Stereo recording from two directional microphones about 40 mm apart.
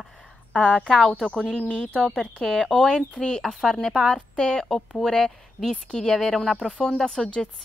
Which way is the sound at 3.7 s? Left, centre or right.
Centre.